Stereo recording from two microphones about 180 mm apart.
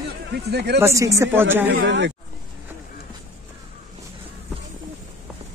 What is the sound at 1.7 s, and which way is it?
Speech, 75° right (ahead or behind).